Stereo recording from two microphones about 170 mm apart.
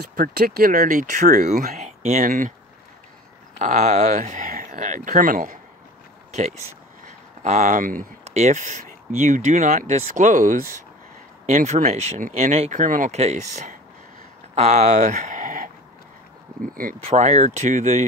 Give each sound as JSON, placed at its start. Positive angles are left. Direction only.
{"t": 0.1, "sound": "speech", "side_deg": -55}
{"t": 3.5, "sound": "speech", "side_deg": -45}
{"t": 6.3, "sound": "speech", "side_deg": -40}
{"t": 17.0, "sound": "speech", "side_deg": -40}